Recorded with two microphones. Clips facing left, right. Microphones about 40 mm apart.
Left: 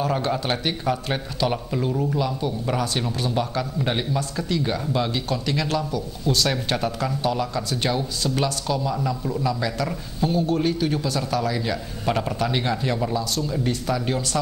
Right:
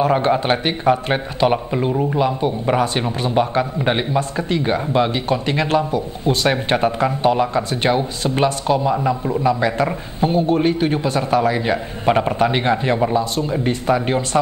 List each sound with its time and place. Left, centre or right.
0.0 s a man's voice: right